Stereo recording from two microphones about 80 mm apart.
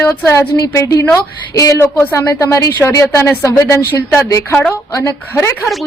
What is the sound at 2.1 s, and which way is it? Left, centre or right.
Speech, left.